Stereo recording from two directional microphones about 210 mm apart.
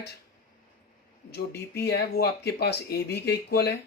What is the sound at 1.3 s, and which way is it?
Speech, 50° left (ahead or behind).